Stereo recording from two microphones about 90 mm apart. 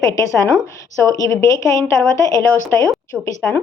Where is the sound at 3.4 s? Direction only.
15° left (ahead or behind).